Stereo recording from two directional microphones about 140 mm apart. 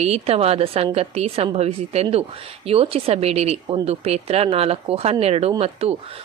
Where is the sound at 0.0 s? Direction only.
45° right (ahead or behind).